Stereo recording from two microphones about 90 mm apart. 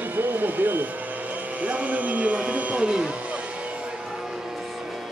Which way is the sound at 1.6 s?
15° right (ahead or behind).